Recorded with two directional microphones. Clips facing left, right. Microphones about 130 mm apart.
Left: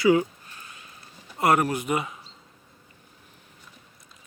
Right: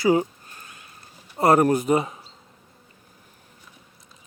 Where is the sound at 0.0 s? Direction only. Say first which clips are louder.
Even; 35° right (ahead or behind).